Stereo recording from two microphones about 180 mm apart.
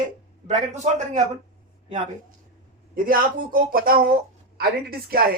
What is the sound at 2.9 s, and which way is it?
A man's voice, 50° right (ahead or behind).